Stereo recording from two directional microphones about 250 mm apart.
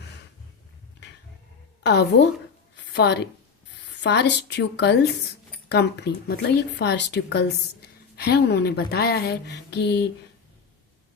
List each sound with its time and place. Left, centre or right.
1.8 s a woman's voice: left